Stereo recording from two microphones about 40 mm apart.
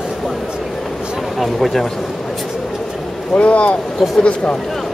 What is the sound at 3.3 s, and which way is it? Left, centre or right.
Speech, left.